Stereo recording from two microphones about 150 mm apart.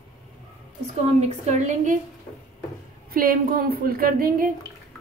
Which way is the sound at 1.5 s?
55° right (ahead or behind).